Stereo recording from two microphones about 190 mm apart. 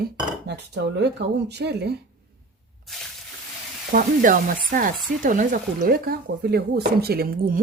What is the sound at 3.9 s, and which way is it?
Speech, 45° right (ahead or behind).